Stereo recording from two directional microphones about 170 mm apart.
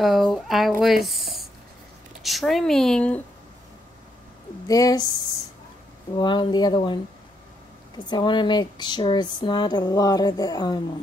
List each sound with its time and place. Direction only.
0.0 s speech: centre (ahead or behind)
4.6 s speech: 20° left (ahead or behind)
6.1 s speech: 25° left (ahead or behind)
8.1 s speech: 25° left (ahead or behind)